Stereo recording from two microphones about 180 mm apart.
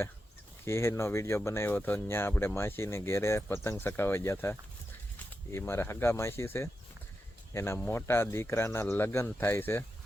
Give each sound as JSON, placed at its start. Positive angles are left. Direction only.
{"t": 0.6, "sound": "speech", "side_deg": 15}